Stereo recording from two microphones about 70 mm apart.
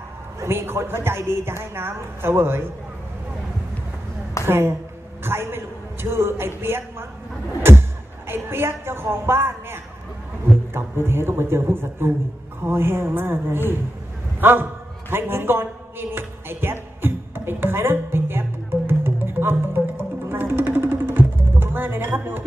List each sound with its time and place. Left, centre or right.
0.4 s a woman's voice: right
4.5 s a woman's voice: right
8.3 s a woman's voice: right
17.0 s music: right